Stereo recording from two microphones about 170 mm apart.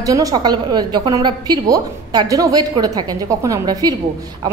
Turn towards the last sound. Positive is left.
turn(degrees=-20)  # may be behind; listen again after turning